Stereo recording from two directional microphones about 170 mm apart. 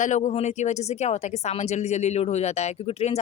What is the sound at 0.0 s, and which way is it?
A woman's voice, 45° left (ahead or behind).